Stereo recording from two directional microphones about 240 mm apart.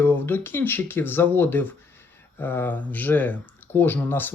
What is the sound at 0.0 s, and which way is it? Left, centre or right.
Speech, centre.